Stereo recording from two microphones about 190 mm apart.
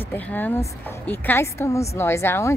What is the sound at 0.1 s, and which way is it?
A woman's voice, 10° left (ahead or behind).